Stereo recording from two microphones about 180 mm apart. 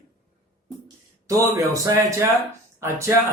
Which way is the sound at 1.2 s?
20° right (ahead or behind).